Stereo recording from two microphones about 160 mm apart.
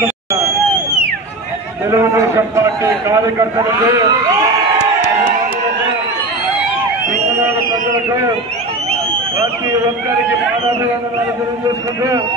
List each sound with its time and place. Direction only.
1.9 s a man's voice: 20° right (ahead or behind)